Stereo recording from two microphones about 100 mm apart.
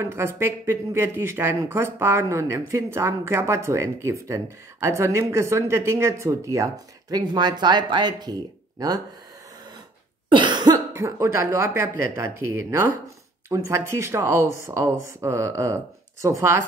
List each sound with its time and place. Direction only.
0.0 s speech: 25° right (ahead or behind)
10.3 s cough: 50° right (ahead or behind)
10.9 s speech: 30° right (ahead or behind)